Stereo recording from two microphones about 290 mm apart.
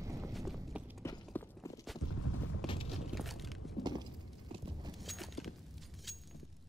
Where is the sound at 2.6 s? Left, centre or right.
Centre.